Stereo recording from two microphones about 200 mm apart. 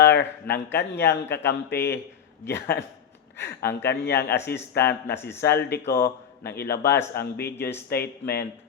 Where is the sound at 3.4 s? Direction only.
55° left (ahead or behind).